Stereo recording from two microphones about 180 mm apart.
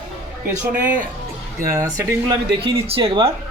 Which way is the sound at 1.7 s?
15° right (ahead or behind).